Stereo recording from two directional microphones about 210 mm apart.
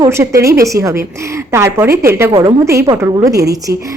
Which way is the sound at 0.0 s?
15° right (ahead or behind).